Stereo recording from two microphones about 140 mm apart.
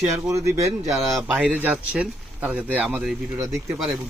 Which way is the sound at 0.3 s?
20° right (ahead or behind).